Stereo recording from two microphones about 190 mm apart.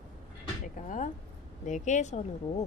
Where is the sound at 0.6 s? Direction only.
45° left (ahead or behind).